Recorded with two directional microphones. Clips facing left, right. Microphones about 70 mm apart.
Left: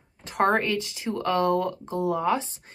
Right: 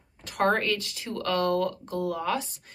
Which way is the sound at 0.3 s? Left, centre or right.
Left.